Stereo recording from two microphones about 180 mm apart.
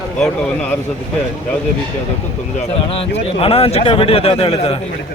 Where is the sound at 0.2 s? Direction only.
5° left (ahead or behind).